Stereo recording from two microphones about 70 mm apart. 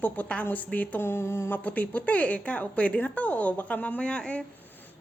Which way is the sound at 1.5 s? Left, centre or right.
Left.